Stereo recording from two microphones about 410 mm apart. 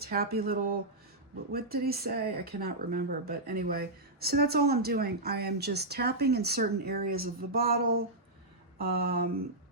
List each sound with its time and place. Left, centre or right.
0.0 s speech: right